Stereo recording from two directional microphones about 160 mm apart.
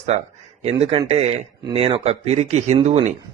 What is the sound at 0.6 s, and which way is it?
Speech, 40° right (ahead or behind).